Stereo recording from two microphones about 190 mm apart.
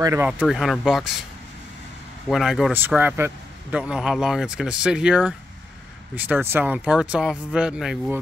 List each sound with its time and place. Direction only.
0.0 s speech: 15° right (ahead or behind)
0.3 s a man's voice: centre (ahead or behind)
2.2 s a man's voice: centre (ahead or behind)